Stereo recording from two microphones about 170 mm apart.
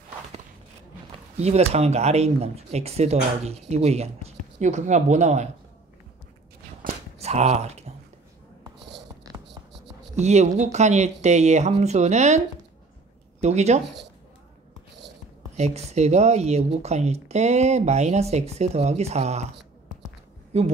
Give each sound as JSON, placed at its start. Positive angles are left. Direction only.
{"t": 1.4, "sound": "speech", "side_deg": -40}
{"t": 7.2, "sound": "speech", "side_deg": -40}
{"t": 10.1, "sound": "speech", "side_deg": -40}
{"t": 13.4, "sound": "speech", "side_deg": -40}
{"t": 15.5, "sound": "speech", "side_deg": -40}
{"t": 20.5, "sound": "speech", "side_deg": -40}